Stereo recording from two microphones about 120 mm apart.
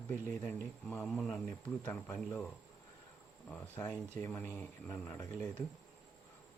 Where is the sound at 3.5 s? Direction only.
15° left (ahead or behind).